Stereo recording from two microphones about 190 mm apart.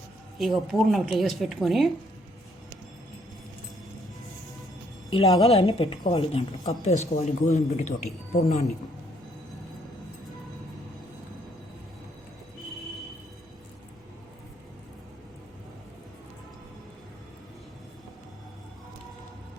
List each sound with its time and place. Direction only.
0.3 s speech: centre (ahead or behind)
5.1 s a woman's voice: 30° left (ahead or behind)